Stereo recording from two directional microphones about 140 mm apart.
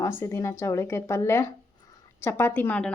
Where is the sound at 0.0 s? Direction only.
20° left (ahead or behind).